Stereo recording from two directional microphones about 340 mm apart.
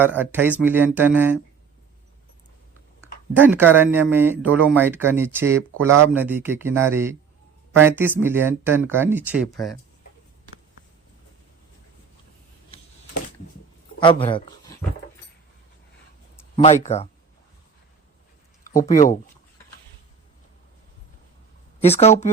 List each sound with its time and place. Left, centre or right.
0.2 s speech: centre
3.4 s speech: centre
14.0 s speech: centre
16.6 s speech: centre
18.7 s speech: left
21.8 s speech: centre